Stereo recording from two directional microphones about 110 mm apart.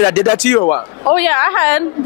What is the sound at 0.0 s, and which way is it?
A woman's voice, 20° left (ahead or behind).